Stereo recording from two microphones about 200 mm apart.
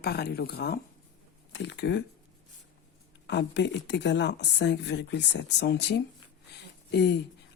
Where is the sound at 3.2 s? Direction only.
60° left (ahead or behind).